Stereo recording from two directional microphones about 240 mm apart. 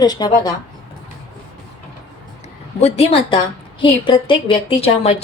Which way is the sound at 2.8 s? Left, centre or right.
Left.